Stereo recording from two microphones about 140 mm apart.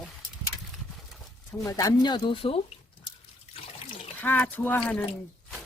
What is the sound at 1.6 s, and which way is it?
Speech, 25° left (ahead or behind).